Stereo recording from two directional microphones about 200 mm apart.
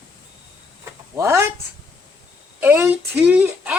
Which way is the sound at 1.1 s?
15° right (ahead or behind).